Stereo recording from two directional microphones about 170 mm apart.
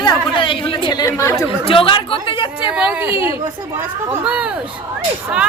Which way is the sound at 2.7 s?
5° right (ahead or behind).